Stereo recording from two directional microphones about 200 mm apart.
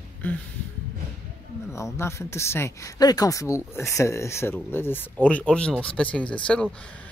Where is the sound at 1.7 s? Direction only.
15° left (ahead or behind).